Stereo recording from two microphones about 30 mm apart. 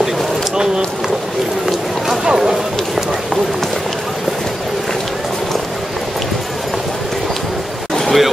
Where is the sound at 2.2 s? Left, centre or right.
Right.